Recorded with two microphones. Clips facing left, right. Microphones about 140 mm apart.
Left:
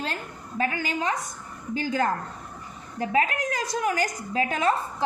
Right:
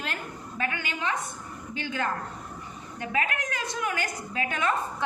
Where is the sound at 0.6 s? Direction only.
35° left (ahead or behind).